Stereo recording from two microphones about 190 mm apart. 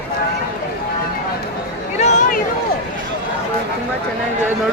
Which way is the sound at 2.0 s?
40° left (ahead or behind).